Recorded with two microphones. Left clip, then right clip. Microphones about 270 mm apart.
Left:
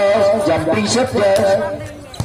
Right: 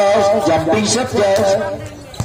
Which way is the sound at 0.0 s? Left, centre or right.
Right.